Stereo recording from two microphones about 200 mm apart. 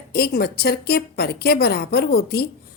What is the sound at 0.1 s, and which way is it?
A woman's voice, 50° left (ahead or behind).